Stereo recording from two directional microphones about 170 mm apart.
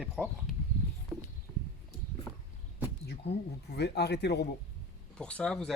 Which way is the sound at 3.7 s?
75° left (ahead or behind).